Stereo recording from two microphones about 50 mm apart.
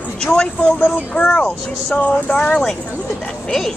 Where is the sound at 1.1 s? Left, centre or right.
Left.